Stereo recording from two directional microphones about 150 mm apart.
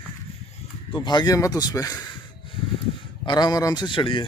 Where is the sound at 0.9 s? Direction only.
30° left (ahead or behind).